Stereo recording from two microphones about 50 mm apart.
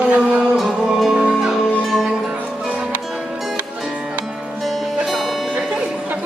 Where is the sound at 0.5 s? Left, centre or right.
Centre.